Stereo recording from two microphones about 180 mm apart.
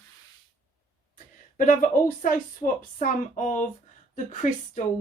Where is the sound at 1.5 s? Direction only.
50° left (ahead or behind).